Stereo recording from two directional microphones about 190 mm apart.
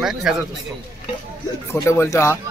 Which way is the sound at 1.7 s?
15° left (ahead or behind).